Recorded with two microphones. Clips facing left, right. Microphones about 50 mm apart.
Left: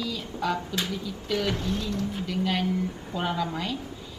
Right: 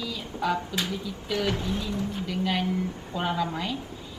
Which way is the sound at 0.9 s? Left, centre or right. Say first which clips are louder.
Left 1 dB; centre.